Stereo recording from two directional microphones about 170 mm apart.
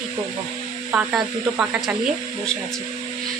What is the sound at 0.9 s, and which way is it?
Speech, 5° right (ahead or behind).